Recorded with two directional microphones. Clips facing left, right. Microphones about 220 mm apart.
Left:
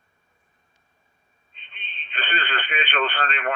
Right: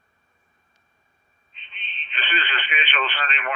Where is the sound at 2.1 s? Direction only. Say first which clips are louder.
Left 1 dB; 50° left (ahead or behind).